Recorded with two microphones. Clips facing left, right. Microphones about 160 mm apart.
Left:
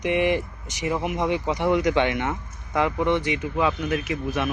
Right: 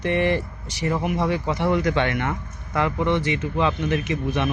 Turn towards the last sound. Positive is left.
turn(degrees=5)  # may be behind; listen again after turning